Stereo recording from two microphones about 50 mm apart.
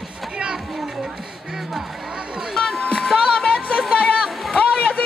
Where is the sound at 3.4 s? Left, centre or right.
Centre.